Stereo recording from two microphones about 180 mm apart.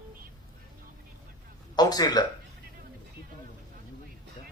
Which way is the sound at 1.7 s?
20° left (ahead or behind).